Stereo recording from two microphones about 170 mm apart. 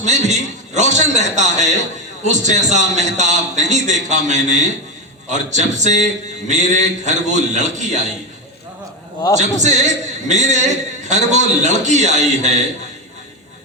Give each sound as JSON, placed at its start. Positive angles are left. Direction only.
{"t": 0.0, "sound": "a man's voice", "side_deg": -45}
{"t": 9.4, "sound": "a man's voice", "side_deg": -45}